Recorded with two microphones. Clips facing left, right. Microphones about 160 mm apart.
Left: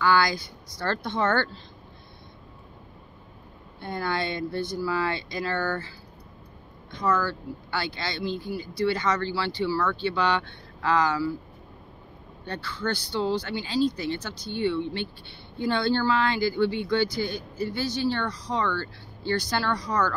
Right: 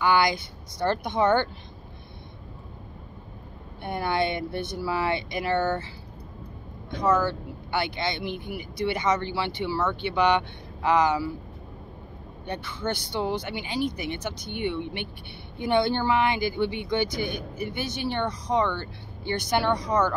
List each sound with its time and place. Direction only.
0.0 s a woman's voice: 20° right (ahead or behind)
3.8 s speech: 20° right (ahead or behind)
7.0 s speech: 20° right (ahead or behind)
12.4 s speech: 20° right (ahead or behind)